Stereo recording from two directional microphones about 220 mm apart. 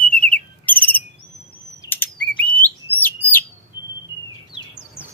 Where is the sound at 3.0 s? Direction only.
10° left (ahead or behind).